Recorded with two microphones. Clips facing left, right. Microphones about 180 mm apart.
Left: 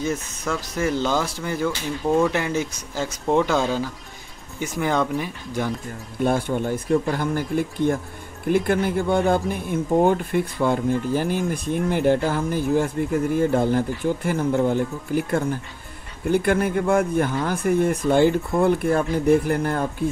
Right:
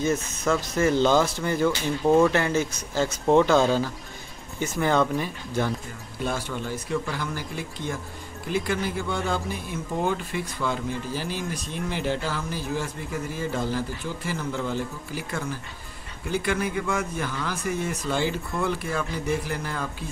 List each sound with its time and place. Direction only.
0.7 s speech: 10° left (ahead or behind)
6.2 s speech: 55° left (ahead or behind)